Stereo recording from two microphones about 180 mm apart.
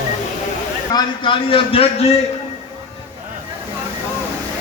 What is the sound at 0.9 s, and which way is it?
A man's voice, 25° left (ahead or behind).